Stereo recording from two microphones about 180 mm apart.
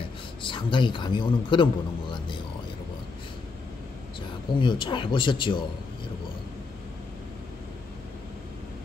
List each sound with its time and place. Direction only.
0.4 s a man's voice: 25° left (ahead or behind)
4.6 s speech: 25° left (ahead or behind)